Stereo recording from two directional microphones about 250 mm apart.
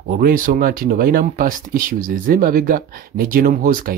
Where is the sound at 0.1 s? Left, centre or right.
Right.